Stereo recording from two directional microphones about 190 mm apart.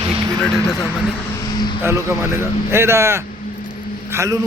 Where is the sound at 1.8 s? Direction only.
15° right (ahead or behind).